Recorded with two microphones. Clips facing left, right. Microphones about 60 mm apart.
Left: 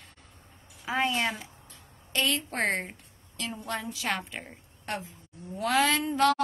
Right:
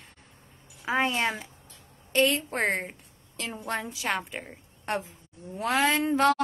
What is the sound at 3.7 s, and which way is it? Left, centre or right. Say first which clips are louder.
Speech: right 3 dB; right.